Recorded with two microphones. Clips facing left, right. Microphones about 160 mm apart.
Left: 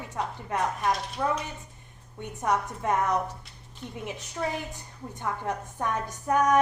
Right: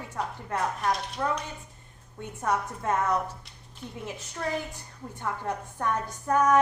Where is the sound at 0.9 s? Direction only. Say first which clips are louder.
Left 1 dB; centre (ahead or behind).